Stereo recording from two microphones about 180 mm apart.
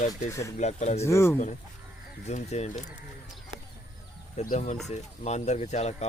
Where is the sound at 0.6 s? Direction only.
40° left (ahead or behind).